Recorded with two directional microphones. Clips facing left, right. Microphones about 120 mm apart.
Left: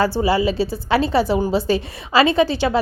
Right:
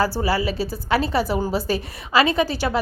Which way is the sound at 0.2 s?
25° left (ahead or behind).